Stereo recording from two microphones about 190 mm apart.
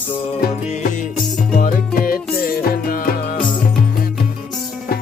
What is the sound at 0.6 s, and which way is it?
Music, 40° left (ahead or behind).